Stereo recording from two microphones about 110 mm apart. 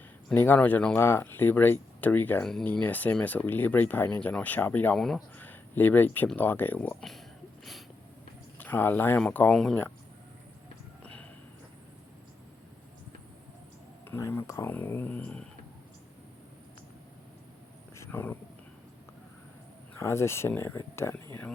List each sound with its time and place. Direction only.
0.3 s speech: 15° left (ahead or behind)
2.4 s speech: 5° left (ahead or behind)
2.6 s speech: 15° left (ahead or behind)
4.9 s speech: 5° left (ahead or behind)
5.4 s speech: 15° left (ahead or behind)
7.6 s a sound: centre (ahead or behind)
8.5 s speech: 15° left (ahead or behind)
11.0 s a sound: 10° left (ahead or behind)
14.0 s speech: 25° left (ahead or behind)
17.9 s a sound: 20° left (ahead or behind)
20.0 s speech: 25° left (ahead or behind)